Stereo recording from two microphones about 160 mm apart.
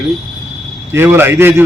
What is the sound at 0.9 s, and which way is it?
Speech, 15° right (ahead or behind).